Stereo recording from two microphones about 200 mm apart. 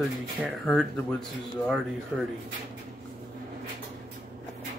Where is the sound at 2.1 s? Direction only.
Centre (ahead or behind).